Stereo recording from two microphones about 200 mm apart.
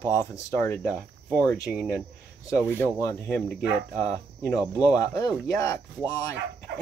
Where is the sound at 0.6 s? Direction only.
10° left (ahead or behind).